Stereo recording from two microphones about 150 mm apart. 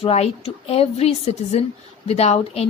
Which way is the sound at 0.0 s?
45° left (ahead or behind).